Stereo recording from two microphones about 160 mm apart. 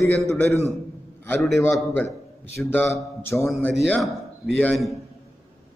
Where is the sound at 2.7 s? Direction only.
15° left (ahead or behind).